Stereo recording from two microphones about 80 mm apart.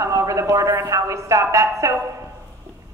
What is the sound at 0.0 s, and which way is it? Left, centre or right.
A woman's voice, right.